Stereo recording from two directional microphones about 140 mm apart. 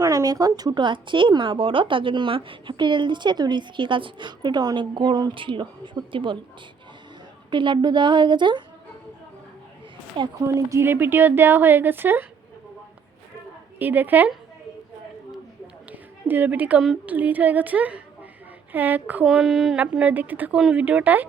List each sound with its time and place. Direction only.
0.0 s speech: 25° right (ahead or behind)
7.5 s speech: 35° right (ahead or behind)
10.4 s speech: 20° right (ahead or behind)
13.7 s speech: 15° right (ahead or behind)
15.3 s a sound: 10° right (ahead or behind)
18.7 s speech: 15° right (ahead or behind)